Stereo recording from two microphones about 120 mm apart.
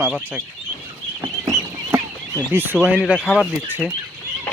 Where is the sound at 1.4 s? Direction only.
25° right (ahead or behind).